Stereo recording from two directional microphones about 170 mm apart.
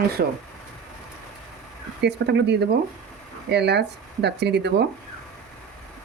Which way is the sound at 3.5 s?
80° right.